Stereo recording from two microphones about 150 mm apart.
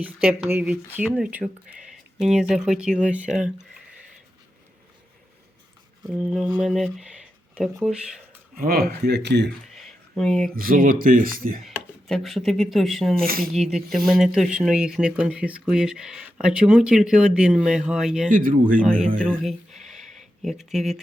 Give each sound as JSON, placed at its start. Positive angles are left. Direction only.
{"t": 0.0, "sound": "speech", "side_deg": -10}
{"t": 6.1, "sound": "speech", "side_deg": -5}
{"t": 8.5, "sound": "speech", "side_deg": -80}
{"t": 9.7, "sound": "a sound", "side_deg": 0}
{"t": 10.5, "sound": "speech", "side_deg": -70}
{"t": 11.6, "sound": "speech", "side_deg": 0}
{"t": 13.1, "sound": "speech", "side_deg": -75}
{"t": 13.5, "sound": "speech", "side_deg": 0}
{"t": 18.3, "sound": "speech", "side_deg": -65}
{"t": 19.4, "sound": "a sound", "side_deg": 0}